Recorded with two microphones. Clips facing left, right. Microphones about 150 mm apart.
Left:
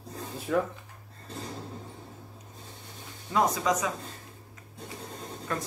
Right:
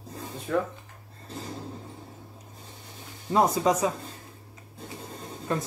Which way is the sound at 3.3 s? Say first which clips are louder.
Right 3 dB; 30° right (ahead or behind).